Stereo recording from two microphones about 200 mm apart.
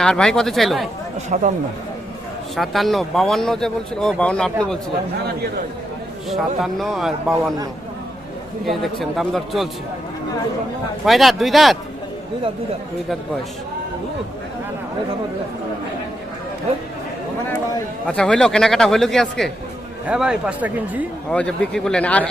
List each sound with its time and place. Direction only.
0.0 s speech: 5° left (ahead or behind)
1.3 s speech: 40° right (ahead or behind)
2.6 s speech: centre (ahead or behind)
6.3 s speech: centre (ahead or behind)
8.6 s speech: centre (ahead or behind)
11.0 s speech: centre (ahead or behind)
18.1 s speech: 5° left (ahead or behind)
21.2 s speech: 5° left (ahead or behind)